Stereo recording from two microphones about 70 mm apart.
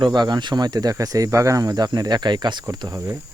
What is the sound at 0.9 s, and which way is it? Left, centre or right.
Speech, right.